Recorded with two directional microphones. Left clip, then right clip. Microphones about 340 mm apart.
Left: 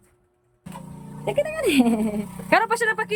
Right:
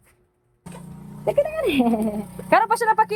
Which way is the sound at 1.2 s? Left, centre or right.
Centre.